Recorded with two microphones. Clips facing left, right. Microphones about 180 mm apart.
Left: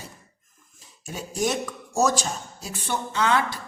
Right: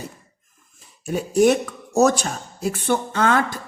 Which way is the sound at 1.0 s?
65° right (ahead or behind).